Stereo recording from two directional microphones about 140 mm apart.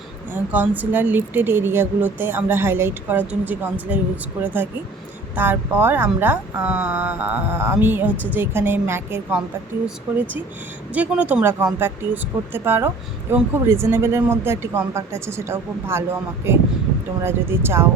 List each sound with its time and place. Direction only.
0.5 s speech: 10° right (ahead or behind)
5.4 s speech: 15° right (ahead or behind)
10.9 s speech: 10° right (ahead or behind)